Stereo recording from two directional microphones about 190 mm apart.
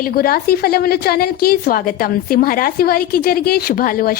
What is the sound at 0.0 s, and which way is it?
A woman's voice, 50° left (ahead or behind).